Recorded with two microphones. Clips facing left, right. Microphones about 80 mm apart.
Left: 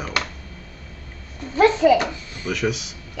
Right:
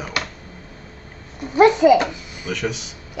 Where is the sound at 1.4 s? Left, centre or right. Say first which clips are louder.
Right 3 dB; centre.